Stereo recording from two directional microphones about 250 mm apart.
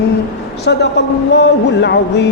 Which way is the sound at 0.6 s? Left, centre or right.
Left.